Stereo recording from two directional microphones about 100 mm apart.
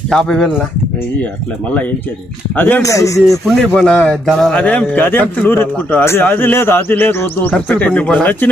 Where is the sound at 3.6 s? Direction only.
10° left (ahead or behind).